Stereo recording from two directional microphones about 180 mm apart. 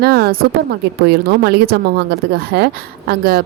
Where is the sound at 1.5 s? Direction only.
65° right (ahead or behind).